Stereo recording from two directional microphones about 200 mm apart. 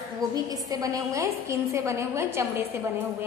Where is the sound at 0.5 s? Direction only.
20° right (ahead or behind).